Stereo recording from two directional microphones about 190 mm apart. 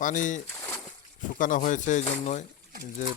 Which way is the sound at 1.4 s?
40° left (ahead or behind).